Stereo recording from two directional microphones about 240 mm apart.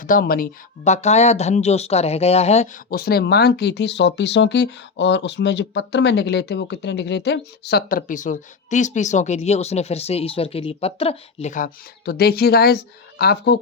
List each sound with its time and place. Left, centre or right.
0.0 s speech: left